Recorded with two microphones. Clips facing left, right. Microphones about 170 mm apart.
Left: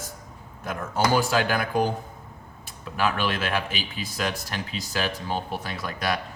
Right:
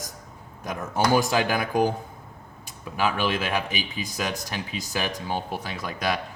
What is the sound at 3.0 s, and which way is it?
Speech, 15° right (ahead or behind).